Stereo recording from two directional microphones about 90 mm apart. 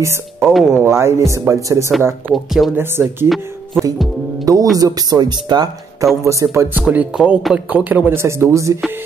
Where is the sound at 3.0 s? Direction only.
25° right (ahead or behind).